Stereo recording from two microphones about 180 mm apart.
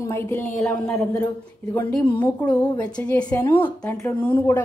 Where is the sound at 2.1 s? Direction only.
10° left (ahead or behind).